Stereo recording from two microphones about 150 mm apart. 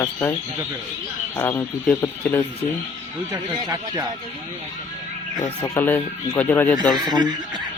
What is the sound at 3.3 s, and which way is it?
Speech, 25° right (ahead or behind).